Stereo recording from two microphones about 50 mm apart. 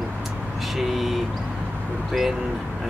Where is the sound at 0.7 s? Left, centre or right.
Centre.